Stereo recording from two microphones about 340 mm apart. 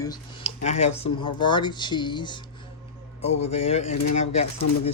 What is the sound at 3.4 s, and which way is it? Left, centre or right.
Speech, centre.